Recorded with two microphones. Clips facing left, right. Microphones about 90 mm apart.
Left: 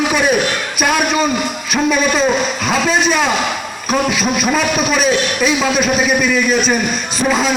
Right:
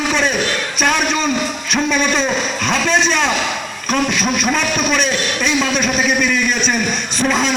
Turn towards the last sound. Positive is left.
turn(degrees=5)  # may be behind; listen again after turning